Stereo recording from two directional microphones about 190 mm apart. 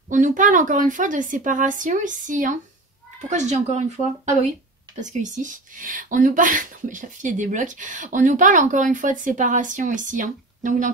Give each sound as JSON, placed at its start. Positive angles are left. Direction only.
{"t": 0.1, "sound": "speech", "side_deg": -40}